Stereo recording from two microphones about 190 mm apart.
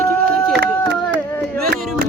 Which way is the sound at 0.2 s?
60° right (ahead or behind).